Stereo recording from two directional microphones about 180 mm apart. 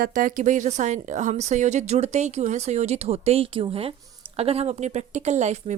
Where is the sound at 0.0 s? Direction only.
50° right (ahead or behind).